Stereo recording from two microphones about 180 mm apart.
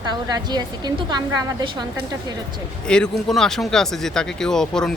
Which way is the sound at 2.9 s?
5° left (ahead or behind).